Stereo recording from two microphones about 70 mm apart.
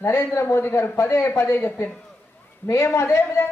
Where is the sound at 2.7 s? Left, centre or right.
Left.